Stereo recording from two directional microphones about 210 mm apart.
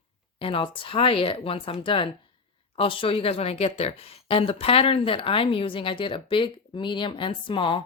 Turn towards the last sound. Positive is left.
turn(degrees=25)  # may be behind; listen again after turning